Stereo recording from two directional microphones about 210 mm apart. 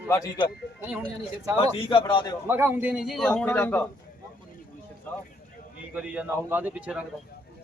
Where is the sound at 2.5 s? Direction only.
10° right (ahead or behind); by 3.8 s 10° left (ahead or behind).